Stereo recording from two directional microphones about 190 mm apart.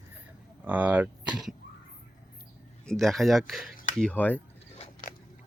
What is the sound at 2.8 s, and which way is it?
Speech, centre (ahead or behind).